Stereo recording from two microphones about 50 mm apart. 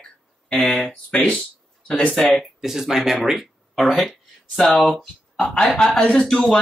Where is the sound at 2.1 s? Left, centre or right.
Centre.